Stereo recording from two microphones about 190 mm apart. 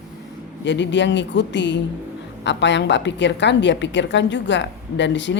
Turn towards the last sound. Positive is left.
turn(degrees=70)  # may be behind; listen again after turning